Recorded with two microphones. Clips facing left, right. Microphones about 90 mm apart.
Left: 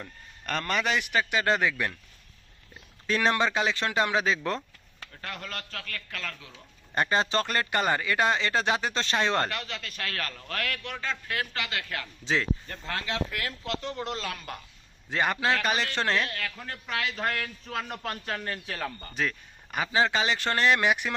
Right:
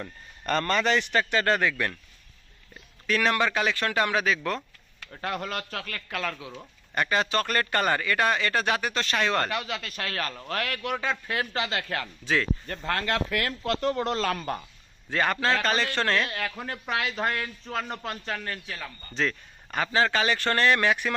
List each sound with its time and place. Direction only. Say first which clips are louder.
0.0 s a man's voice: right 5 dB; centre (ahead or behind); by 1.9 s 20° left (ahead or behind)
3.1 s a man's voice: right 1 dB; 25° left (ahead or behind)
5.5 s a man's voice: right 5 dB; 15° right (ahead or behind)
6.9 s a man's voice: even; 30° left (ahead or behind)
10.1 s a man's voice: right 4 dB; 10° right (ahead or behind); by 12.0 s 35° right (ahead or behind)
12.2 s a man's voice: right 1 dB; 20° left (ahead or behind)
12.6 s speech: right 5 dB; 55° right (ahead or behind)
15.1 s a man's voice: right 1 dB; 15° left (ahead or behind)
16.2 s a man's voice: right 3 dB; 20° right (ahead or behind)
16.9 s a man's voice: right 2 dB; 10° right (ahead or behind)
18.3 s a man's voice: even; 25° left (ahead or behind)
18.6 s speech: left 4 dB; 45° left (ahead or behind)
19.1 s a man's voice: right 6 dB; 10° left (ahead or behind)